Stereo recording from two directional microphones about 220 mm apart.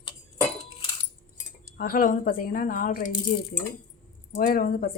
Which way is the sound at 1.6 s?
40° left (ahead or behind).